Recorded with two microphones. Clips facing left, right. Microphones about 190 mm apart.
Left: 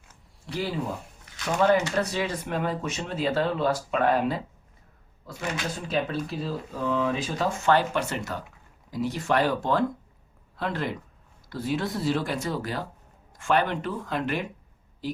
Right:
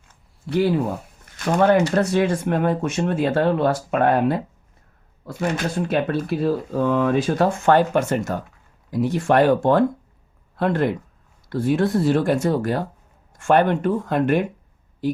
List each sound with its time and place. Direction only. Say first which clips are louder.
0.5 s speech: right 10 dB; 60° right (ahead or behind)